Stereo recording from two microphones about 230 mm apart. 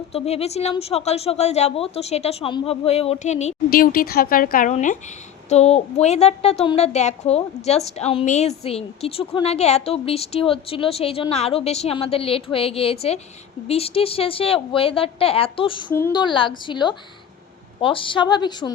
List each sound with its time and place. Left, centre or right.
0.1 s a woman's voice: left
15.9 s a woman's voice: centre